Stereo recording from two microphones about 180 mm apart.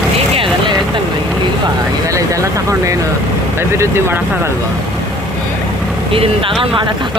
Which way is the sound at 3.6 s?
15° right (ahead or behind).